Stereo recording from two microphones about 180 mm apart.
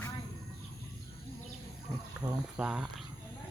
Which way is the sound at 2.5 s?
5° right (ahead or behind).